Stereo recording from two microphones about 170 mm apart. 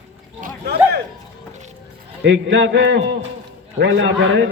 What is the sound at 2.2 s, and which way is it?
A man's voice, 90° right.